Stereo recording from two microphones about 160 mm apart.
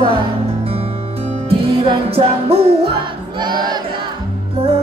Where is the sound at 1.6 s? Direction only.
35° right (ahead or behind).